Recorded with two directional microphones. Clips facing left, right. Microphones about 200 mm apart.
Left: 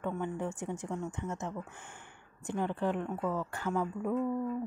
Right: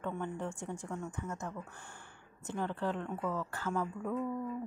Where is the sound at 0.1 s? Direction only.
15° left (ahead or behind).